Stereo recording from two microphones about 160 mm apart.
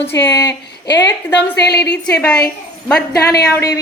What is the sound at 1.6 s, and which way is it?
Speech, 90° left.